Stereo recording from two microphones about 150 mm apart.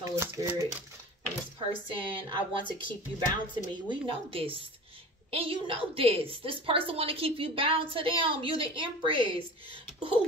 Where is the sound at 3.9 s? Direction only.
35° right (ahead or behind).